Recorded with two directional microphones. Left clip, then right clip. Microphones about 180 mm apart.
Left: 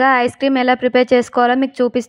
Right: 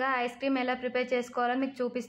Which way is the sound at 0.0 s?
45° left (ahead or behind).